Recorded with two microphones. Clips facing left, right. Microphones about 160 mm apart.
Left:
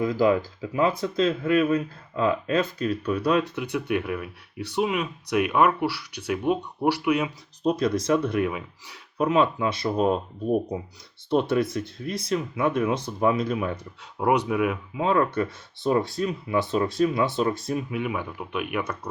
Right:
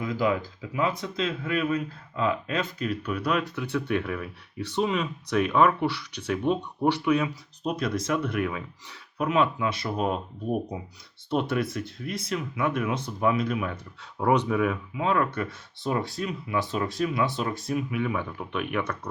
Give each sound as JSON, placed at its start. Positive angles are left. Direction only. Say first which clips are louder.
{"t": 0.0, "sound": "speech", "louder": "left 5 dB", "side_deg": 35}
{"t": 3.5, "sound": "speech", "louder": "left 1 dB", "side_deg": 15}
{"t": 7.6, "sound": "speech", "louder": "left 5 dB", "side_deg": 30}
{"t": 9.2, "sound": "speech", "louder": "left 3 dB", "side_deg": 30}
{"t": 11.3, "sound": "speech", "louder": "left 4 dB", "side_deg": 30}
{"t": 14.2, "sound": "speech", "louder": "left 1 dB", "side_deg": 10}
{"t": 14.9, "sound": "speech", "louder": "left 4 dB", "side_deg": 30}
{"t": 18.0, "sound": "speech", "louder": "even", "side_deg": 10}